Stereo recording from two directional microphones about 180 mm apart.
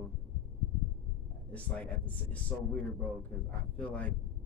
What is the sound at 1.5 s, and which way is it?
A man's voice, 5° left (ahead or behind).